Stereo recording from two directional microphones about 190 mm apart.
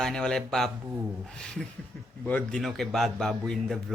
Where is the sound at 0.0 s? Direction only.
5° left (ahead or behind).